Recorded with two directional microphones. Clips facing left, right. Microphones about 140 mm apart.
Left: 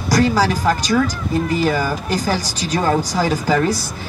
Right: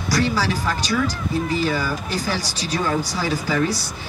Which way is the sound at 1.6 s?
45° left (ahead or behind).